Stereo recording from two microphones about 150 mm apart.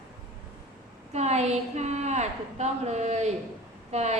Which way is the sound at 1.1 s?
50° right (ahead or behind).